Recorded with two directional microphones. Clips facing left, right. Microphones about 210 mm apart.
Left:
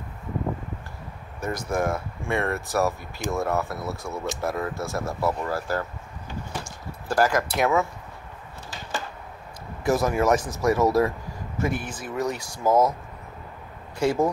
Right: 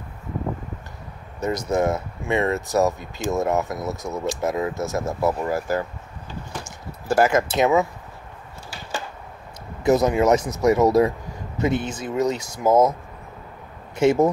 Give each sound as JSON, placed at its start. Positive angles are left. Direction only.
{"t": 1.4, "sound": "speech", "side_deg": -20}
{"t": 7.1, "sound": "speech", "side_deg": -25}
{"t": 9.8, "sound": "speech", "side_deg": -20}
{"t": 13.9, "sound": "speech", "side_deg": -20}